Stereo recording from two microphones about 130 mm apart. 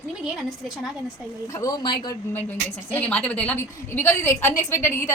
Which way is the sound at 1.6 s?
30° left (ahead or behind).